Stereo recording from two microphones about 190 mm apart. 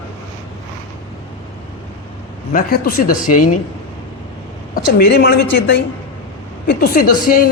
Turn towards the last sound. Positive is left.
turn(degrees=50)  # may be behind; listen again after turning